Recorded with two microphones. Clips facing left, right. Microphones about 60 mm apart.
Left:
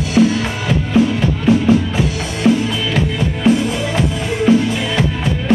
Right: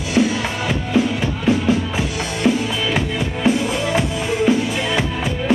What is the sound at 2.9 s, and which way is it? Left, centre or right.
Music, centre.